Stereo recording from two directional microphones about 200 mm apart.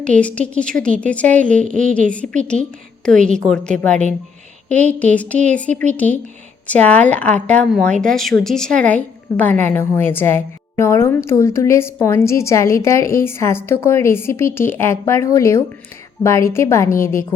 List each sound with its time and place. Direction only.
0.2 s a woman's voice: 5° left (ahead or behind)
1.6 s a woman's voice: 40° right (ahead or behind)
1.9 s a woman's voice: 5° left (ahead or behind)
5.1 s a woman's voice: 5° left (ahead or behind)